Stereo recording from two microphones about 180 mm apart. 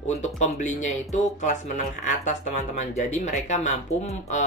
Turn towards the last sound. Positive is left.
turn(degrees=40)  # may be behind; listen again after turning